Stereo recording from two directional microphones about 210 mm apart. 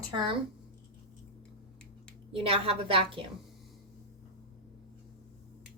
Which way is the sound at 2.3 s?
25° right (ahead or behind).